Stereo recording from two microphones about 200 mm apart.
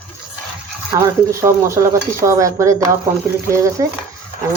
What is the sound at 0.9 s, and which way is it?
Speech, 15° right (ahead or behind).